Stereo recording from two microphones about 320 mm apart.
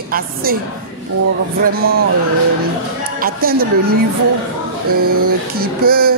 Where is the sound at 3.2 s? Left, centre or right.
Right.